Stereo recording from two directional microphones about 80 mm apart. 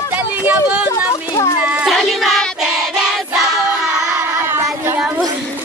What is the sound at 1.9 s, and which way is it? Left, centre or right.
Child singing, centre.